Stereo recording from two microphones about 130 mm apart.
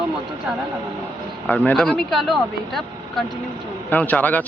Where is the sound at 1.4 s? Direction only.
10° left (ahead or behind).